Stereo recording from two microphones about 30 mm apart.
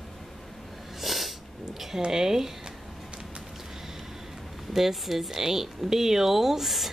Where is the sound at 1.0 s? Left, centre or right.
Centre.